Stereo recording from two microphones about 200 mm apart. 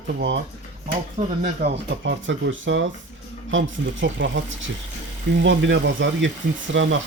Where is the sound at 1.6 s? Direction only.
65° right (ahead or behind).